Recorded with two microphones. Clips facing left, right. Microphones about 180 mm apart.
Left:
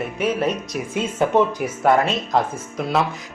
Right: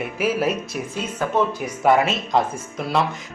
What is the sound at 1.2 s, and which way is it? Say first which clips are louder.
Speech: left 5 dB; 25° left (ahead or behind).